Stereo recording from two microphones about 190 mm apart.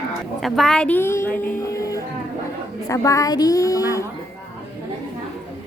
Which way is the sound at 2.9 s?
15° left (ahead or behind).